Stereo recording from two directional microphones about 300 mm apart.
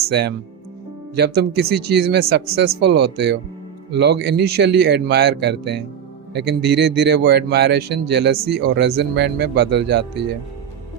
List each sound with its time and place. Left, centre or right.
0.0 s speech: right